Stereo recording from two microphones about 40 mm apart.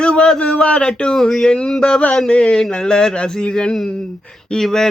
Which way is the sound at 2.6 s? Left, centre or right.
Centre.